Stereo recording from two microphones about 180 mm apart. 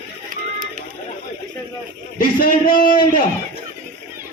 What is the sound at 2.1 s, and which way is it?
A man's voice, 50° left (ahead or behind).